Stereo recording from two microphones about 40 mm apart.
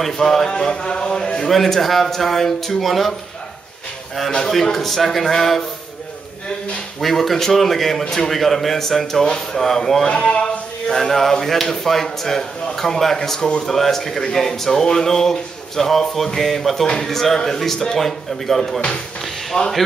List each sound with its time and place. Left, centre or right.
0.0 s speech: centre
1.4 s speech: centre
4.3 s speech: centre
7.0 s speech: centre
10.0 s speech: left
10.9 s speech: centre
19.5 s speech: left